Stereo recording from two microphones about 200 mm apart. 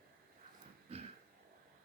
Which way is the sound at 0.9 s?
30° right (ahead or behind).